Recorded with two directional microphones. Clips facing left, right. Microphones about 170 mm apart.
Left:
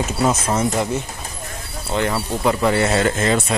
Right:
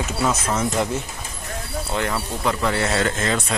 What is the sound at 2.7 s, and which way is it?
Speech, 15° left (ahead or behind).